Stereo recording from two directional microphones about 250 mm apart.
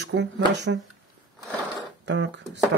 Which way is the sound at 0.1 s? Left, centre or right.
Right.